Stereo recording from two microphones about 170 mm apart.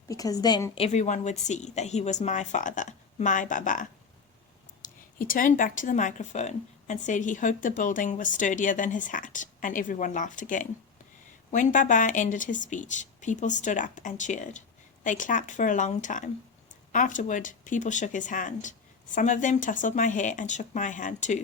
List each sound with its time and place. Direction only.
0.1 s a woman's voice: 20° left (ahead or behind)
0.9 s a woman's voice: 45° left (ahead or behind)
5.2 s a woman's voice: 55° left (ahead or behind)